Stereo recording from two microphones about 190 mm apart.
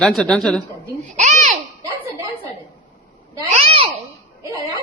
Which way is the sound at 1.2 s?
40° right (ahead or behind).